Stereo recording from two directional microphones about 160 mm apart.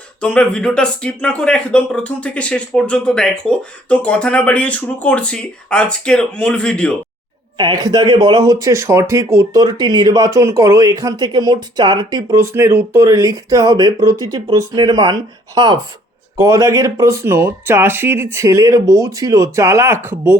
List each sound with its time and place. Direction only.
0.2 s speech: 5° left (ahead or behind)
7.5 s speech: 25° right (ahead or behind)